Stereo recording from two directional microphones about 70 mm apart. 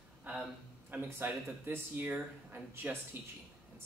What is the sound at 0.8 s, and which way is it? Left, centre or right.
Speech, right.